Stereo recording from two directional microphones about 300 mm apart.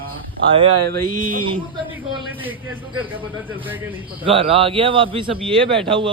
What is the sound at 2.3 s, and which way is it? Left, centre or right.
Speech, centre.